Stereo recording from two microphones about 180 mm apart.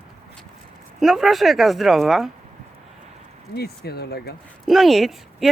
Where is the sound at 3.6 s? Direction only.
60° left (ahead or behind).